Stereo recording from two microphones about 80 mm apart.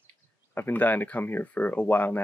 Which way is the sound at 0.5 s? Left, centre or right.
Left.